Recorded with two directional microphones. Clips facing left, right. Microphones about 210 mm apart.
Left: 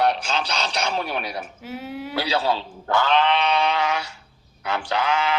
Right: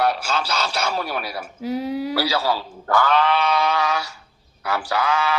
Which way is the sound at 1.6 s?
35° right (ahead or behind).